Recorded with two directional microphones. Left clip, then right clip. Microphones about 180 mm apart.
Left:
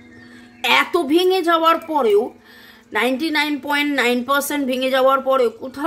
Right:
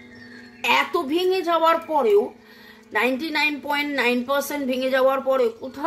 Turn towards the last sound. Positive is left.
turn(degrees=25)  # may be behind; listen again after turning